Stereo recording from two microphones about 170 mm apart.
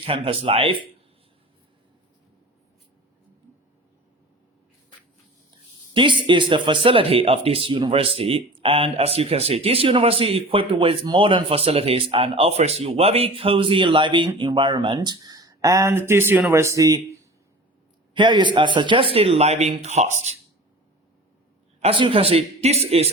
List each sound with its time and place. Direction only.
0.1 s speech: 35° right (ahead or behind)
5.9 s speech: 30° right (ahead or behind)
21.8 s speech: 35° right (ahead or behind)